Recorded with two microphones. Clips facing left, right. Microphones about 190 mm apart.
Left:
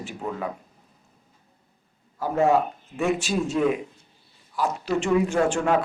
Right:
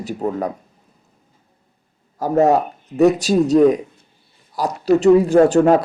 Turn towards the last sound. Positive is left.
turn(degrees=-40)  # may be behind; listen again after turning